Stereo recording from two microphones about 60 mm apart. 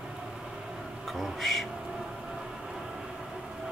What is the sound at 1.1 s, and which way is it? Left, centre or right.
Speech, centre.